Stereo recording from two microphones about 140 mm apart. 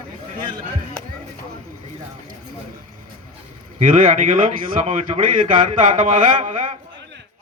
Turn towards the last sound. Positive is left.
turn(degrees=-60)  # may be behind; listen again after turning